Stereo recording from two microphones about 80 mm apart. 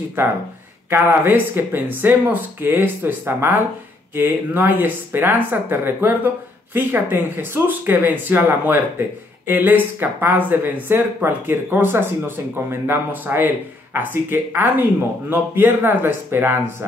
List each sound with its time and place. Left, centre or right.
0.8 s speech: right